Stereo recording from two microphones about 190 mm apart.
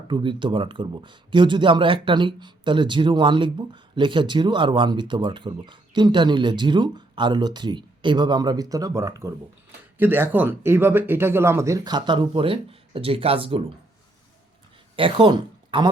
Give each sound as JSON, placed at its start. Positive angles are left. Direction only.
{"t": 0.1, "sound": "speech", "side_deg": -25}
{"t": 14.9, "sound": "speech", "side_deg": -25}